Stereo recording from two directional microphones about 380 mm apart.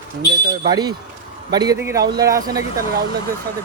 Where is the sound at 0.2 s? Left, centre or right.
Centre.